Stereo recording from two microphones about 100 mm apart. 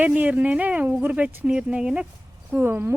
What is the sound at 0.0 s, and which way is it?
Speech, 15° right (ahead or behind).